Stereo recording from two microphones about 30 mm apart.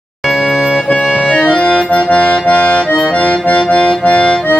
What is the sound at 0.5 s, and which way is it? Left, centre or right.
Music, centre.